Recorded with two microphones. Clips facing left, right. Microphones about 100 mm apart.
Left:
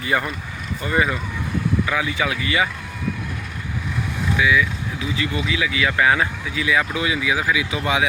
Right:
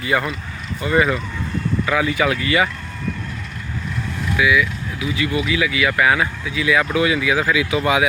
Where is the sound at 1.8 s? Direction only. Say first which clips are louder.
Right 4 dB; 30° right (ahead or behind).